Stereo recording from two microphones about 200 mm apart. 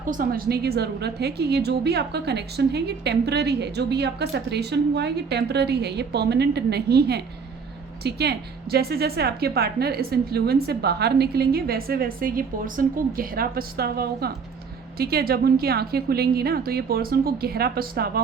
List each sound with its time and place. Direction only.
0.0 s a woman's voice: 45° right (ahead or behind)